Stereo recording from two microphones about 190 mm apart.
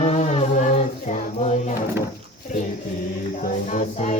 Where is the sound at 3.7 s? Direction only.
40° left (ahead or behind).